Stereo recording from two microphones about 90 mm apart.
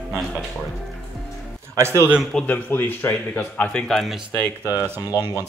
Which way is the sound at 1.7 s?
30° right (ahead or behind).